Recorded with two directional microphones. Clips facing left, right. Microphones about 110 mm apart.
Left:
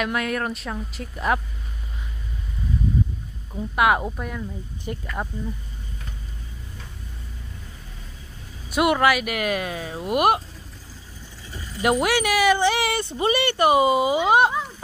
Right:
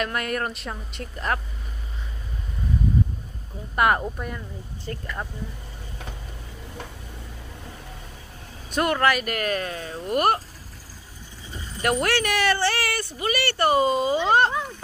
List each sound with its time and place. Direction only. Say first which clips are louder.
0.0 s a woman's voice: left 2 dB; centre (ahead or behind)
3.7 s a woman's voice: left 1 dB; 5° left (ahead or behind)
4.8 s speech: left 2 dB; 15° left (ahead or behind)
8.6 s speech: left 3 dB; 10° left (ahead or behind)
11.8 s speech: left 3 dB; 15° left (ahead or behind)